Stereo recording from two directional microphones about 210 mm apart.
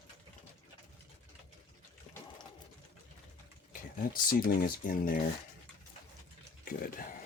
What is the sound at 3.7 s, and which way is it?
Speech, 40° left (ahead or behind).